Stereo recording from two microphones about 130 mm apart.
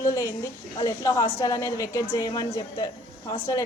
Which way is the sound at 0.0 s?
25° left (ahead or behind).